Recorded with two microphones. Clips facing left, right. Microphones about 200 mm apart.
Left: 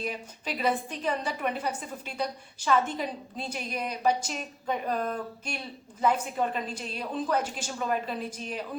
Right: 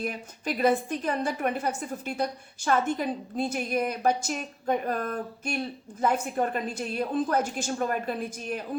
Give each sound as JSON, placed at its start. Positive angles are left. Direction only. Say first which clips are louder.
{"t": 0.0, "sound": "a woman's voice", "louder": "right 2 dB", "side_deg": -50}